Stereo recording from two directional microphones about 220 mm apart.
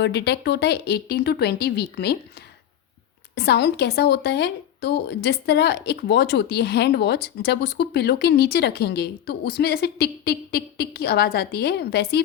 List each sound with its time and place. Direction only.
0.0 s speech: 50° left (ahead or behind)
3.3 s speech: 50° left (ahead or behind)